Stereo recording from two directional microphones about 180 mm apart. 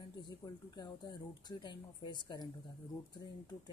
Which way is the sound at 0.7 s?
20° left (ahead or behind).